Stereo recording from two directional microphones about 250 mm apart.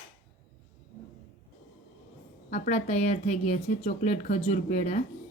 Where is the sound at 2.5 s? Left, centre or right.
Left.